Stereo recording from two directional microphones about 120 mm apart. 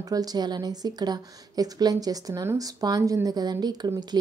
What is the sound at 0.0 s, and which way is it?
A woman's voice, 30° right (ahead or behind).